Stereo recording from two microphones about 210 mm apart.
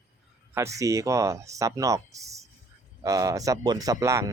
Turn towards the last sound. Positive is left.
turn(degrees=-15)  # may be behind; listen again after turning